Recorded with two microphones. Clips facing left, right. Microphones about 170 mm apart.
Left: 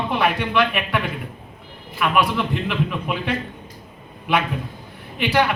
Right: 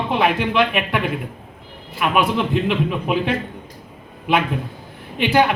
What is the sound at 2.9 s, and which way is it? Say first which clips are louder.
Speech: right 5 dB; 20° right (ahead or behind).